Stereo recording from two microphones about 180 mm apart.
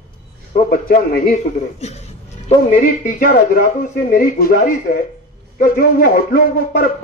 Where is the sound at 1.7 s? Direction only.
35° left (ahead or behind).